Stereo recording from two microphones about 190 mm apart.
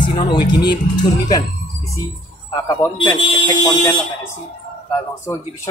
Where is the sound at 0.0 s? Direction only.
25° left (ahead or behind).